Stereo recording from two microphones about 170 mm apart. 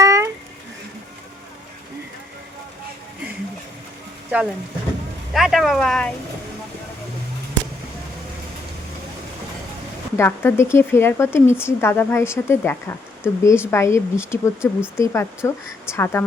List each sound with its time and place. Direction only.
0.0 s a sound: 15° right (ahead or behind)
5.3 s speech: centre (ahead or behind)
10.2 s speech: 15° left (ahead or behind)